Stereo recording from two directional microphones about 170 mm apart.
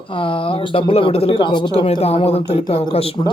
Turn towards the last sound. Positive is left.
turn(degrees=35)  # may be behind; listen again after turning